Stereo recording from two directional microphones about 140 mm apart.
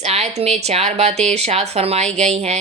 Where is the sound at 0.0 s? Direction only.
50° right (ahead or behind).